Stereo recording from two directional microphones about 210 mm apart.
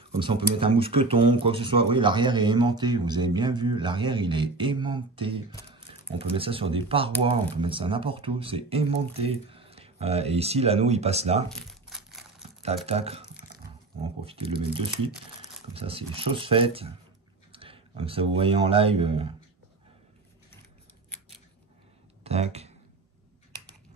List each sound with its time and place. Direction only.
0.2 s speech: 25° right (ahead or behind)
11.5 s crumpling: centre (ahead or behind)
12.4 s speech: 30° right (ahead or behind)
14.2 s speech: 25° right (ahead or behind)
22.2 s speech: 30° right (ahead or behind)